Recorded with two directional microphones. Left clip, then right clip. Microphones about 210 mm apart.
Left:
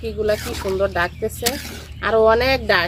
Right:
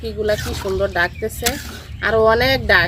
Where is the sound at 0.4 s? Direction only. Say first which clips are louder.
Right 1 dB; 5° left (ahead or behind).